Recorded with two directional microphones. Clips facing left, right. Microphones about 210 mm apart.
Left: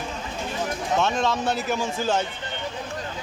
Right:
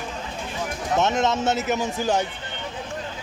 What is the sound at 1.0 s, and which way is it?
A man's voice, 20° right (ahead or behind).